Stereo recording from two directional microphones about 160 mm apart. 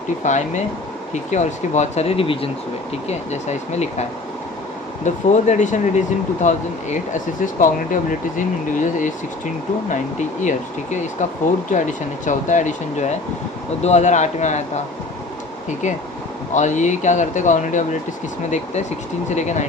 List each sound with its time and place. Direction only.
0.3 s speech: 50° left (ahead or behind)
3.1 s speech: 45° left (ahead or behind)
5.0 s speech: 45° left (ahead or behind)
11.7 s speech: 50° left (ahead or behind)
16.6 s speech: 50° left (ahead or behind)